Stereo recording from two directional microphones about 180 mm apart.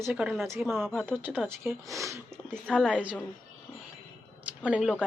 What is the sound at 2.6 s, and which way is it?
Speech, 5° left (ahead or behind).